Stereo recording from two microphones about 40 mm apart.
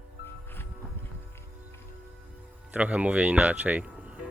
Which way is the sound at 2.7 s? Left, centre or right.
Right.